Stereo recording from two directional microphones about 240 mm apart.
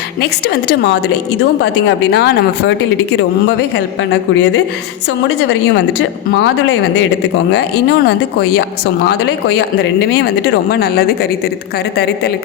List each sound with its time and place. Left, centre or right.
0.2 s speech: left
3.8 s speech: left